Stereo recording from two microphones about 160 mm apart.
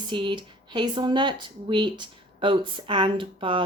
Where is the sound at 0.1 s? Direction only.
30° right (ahead or behind).